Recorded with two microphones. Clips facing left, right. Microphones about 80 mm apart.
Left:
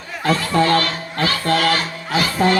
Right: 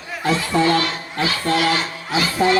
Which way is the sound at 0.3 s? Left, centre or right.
Left.